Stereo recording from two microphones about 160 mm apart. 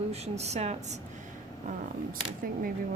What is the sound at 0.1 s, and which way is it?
Speech, 40° right (ahead or behind).